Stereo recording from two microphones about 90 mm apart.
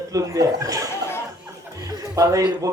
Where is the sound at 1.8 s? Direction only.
40° right (ahead or behind).